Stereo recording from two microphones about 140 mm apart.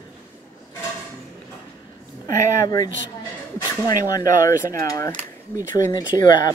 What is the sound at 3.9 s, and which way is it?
Speech, 25° left (ahead or behind).